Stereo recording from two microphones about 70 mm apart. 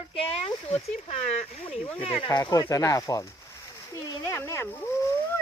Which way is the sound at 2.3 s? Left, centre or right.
Left.